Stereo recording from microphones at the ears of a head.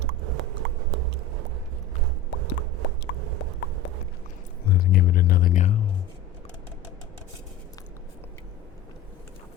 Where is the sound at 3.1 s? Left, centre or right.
Right.